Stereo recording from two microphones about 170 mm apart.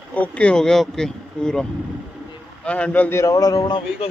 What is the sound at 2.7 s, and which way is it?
Speech, 10° left (ahead or behind).